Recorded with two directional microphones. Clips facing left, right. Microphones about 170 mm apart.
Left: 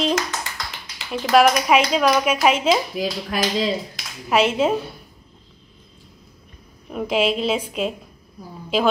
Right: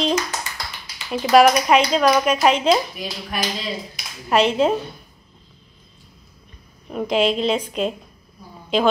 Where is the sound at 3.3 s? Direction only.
90° left.